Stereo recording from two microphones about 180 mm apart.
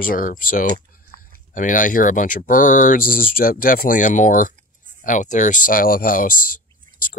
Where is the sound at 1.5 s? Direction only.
45° left (ahead or behind).